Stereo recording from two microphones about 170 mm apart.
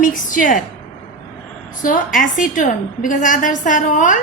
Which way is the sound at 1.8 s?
50° left (ahead or behind).